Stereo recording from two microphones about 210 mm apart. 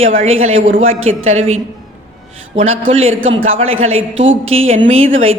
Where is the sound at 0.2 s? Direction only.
30° right (ahead or behind).